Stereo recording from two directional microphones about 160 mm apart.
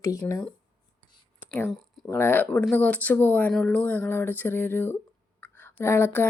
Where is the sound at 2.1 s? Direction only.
15° left (ahead or behind).